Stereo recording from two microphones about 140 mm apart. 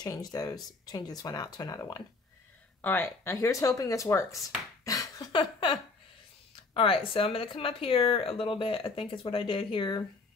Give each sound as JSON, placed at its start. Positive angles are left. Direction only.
{"t": 0.0, "sound": "speech", "side_deg": 30}
{"t": 2.8, "sound": "speech", "side_deg": 15}
{"t": 4.8, "sound": "a sound", "side_deg": 25}
{"t": 6.7, "sound": "speech", "side_deg": 40}